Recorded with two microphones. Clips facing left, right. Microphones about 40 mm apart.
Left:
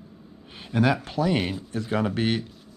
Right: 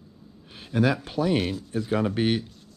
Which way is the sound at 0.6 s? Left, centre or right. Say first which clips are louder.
Left 1 dB; centre.